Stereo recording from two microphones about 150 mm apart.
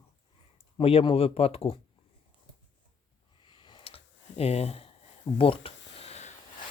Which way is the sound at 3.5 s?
35° left (ahead or behind).